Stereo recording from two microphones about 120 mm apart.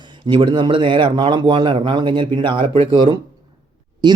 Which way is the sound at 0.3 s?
40° right (ahead or behind).